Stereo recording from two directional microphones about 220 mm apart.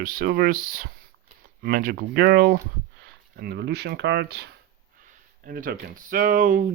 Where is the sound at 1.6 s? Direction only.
45° right (ahead or behind).